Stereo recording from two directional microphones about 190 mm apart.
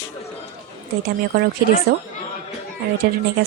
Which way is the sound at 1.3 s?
55° right (ahead or behind).